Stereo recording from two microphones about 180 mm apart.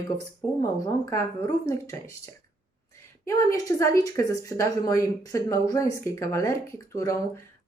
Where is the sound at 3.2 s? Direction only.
20° left (ahead or behind).